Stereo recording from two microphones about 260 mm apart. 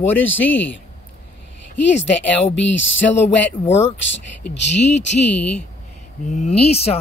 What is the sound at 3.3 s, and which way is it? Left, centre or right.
Speech, centre.